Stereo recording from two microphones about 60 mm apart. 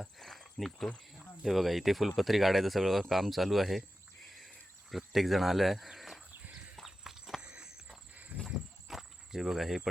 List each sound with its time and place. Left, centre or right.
0.2 s cricket: centre
1.4 s speech: centre
6.7 s horse: centre
7.4 s a sound: centre
8.4 s insect: centre